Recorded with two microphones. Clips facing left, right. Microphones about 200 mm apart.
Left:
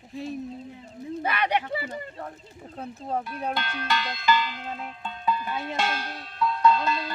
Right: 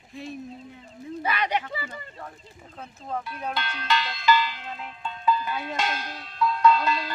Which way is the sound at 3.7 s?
50° left (ahead or behind).